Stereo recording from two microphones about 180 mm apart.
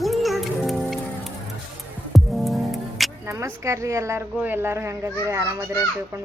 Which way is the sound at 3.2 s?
15° right (ahead or behind).